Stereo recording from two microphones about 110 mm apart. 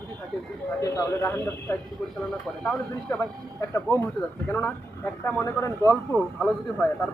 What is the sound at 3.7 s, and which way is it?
Speech, 25° left (ahead or behind).